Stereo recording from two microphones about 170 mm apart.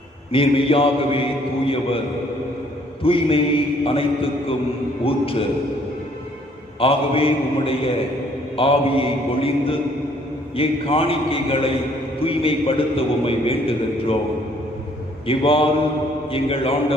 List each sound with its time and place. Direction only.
0.3 s a man's voice: 35° left (ahead or behind)
3.0 s a man's voice: 35° left (ahead or behind)
6.7 s a man's voice: 35° left (ahead or behind)
15.3 s a man's voice: 35° left (ahead or behind)